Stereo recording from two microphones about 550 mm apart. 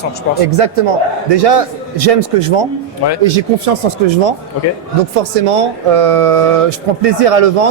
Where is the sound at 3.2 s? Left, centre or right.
Right.